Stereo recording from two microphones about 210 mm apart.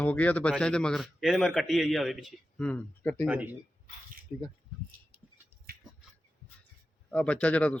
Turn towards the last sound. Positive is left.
turn(degrees=5)  # may be behind; listen again after turning